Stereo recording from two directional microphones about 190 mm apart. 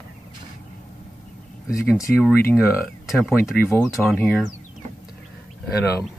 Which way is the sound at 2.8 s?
Centre (ahead or behind).